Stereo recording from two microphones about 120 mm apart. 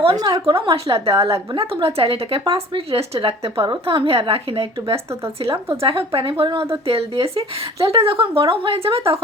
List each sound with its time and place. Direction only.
0.2 s a woman's voice: 30° right (ahead or behind)
0.5 s speech: 50° right (ahead or behind)
6.8 s speech: 55° right (ahead or behind)